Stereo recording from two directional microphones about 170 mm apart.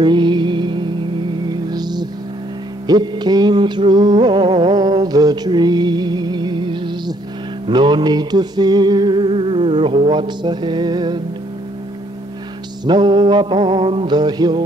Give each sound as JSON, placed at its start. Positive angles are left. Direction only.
{"t": 0.0, "sound": "mantra", "side_deg": -25}
{"t": 1.5, "sound": "music", "side_deg": -25}
{"t": 12.8, "sound": "music", "side_deg": -25}